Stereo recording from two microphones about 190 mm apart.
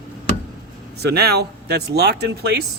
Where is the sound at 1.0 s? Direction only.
60° right (ahead or behind).